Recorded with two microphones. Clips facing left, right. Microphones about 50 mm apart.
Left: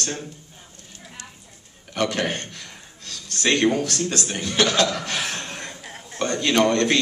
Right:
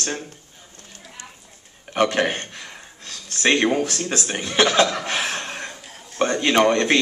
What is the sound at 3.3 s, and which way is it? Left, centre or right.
A man's voice, right.